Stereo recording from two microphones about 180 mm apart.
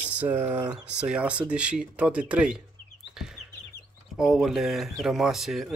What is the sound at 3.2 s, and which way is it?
Bird, 5° right (ahead or behind).